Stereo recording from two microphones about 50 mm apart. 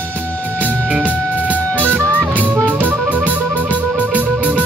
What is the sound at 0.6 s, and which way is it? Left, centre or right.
Music, right.